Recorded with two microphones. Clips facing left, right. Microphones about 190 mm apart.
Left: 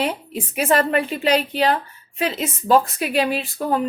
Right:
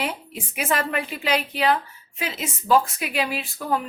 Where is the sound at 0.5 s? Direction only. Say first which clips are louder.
Left 6 dB; 35° left (ahead or behind).